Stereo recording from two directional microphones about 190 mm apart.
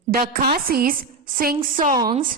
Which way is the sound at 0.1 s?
50° right (ahead or behind).